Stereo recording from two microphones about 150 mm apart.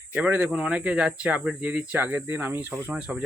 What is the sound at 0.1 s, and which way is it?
Speech, 10° right (ahead or behind).